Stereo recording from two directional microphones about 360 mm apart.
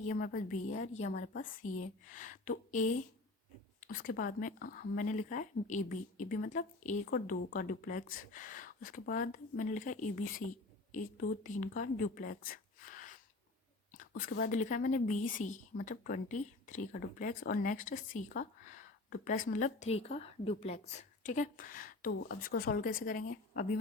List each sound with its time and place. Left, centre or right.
0.1 s speech: left